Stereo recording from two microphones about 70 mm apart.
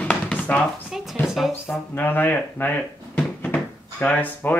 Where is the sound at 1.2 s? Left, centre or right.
Centre.